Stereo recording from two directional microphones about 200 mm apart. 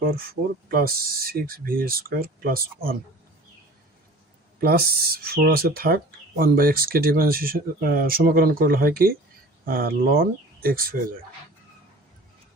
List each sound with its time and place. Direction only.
0.0 s speech: 50° right (ahead or behind)
4.6 s speech: 50° right (ahead or behind)